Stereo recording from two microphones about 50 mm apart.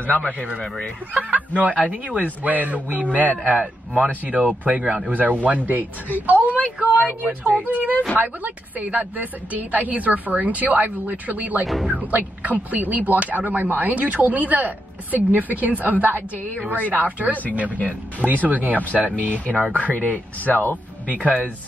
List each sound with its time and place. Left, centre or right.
0.0 s a man's voice: left
1.3 s speech: right
11.6 s speech: centre
11.9 s speech: right
19.7 s speech: left